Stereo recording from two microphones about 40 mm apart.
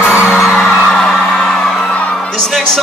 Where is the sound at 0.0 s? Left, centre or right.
Right.